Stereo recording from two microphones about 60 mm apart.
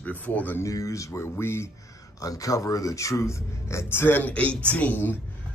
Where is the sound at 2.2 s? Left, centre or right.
Left.